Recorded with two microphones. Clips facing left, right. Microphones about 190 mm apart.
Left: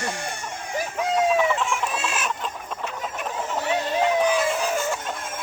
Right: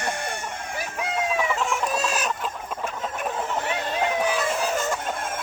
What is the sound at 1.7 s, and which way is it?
Chicken, 40° right (ahead or behind).